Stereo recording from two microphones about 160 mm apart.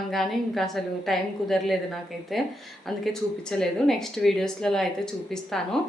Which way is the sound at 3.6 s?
Centre (ahead or behind).